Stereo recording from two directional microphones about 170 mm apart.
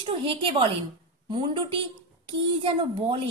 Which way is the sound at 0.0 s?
30° right (ahead or behind).